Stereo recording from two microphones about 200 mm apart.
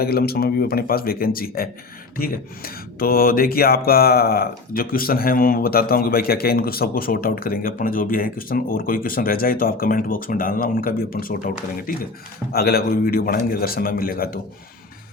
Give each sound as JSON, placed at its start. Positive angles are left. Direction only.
{"t": 0.0, "sound": "speech", "side_deg": 50}